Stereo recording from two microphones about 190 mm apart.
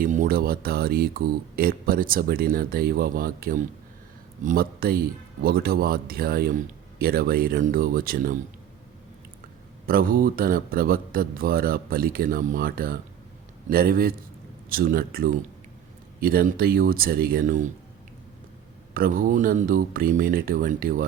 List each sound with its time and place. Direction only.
0.0 s speech: 45° right (ahead or behind)
9.8 s speech: 50° right (ahead or behind)
18.9 s speech: 50° right (ahead or behind)